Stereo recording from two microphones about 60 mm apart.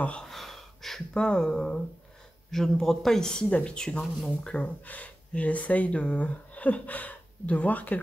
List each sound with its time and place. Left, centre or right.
0.2 s gasp: centre
1.1 s speech: centre